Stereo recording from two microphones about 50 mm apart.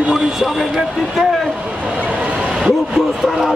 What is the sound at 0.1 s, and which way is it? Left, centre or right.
Speech, centre.